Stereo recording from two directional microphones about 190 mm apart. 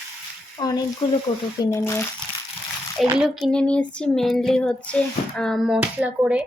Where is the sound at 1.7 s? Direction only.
15° left (ahead or behind).